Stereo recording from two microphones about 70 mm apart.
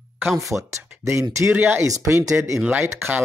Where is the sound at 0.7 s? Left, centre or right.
Right.